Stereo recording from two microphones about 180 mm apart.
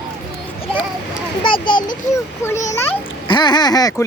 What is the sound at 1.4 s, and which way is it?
Speech, 25° left (ahead or behind).